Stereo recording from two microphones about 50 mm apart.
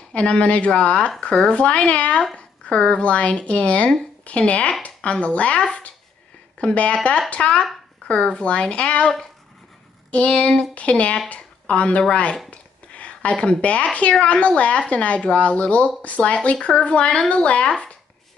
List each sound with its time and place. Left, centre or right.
0.1 s speech: left
10.1 s speech: left
12.4 s a sound: left
14.2 s speech: left